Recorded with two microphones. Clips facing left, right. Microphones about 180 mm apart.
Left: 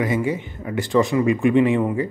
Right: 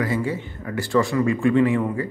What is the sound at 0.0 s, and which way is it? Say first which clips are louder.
Speech: left 2 dB; 20° left (ahead or behind).